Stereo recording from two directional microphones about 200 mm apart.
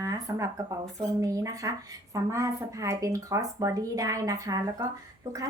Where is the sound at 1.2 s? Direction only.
15° right (ahead or behind).